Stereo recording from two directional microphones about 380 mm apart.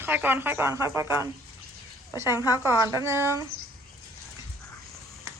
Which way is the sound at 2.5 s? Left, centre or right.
Centre.